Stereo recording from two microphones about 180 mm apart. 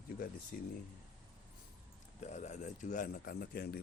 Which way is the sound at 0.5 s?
50° left (ahead or behind).